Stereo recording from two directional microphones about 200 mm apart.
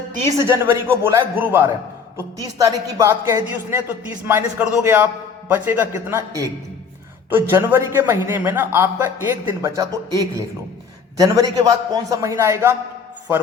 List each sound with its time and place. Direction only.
0.3 s a man's voice: 15° right (ahead or behind)